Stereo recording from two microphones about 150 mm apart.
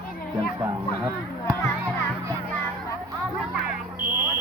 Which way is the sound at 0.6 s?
30° right (ahead or behind).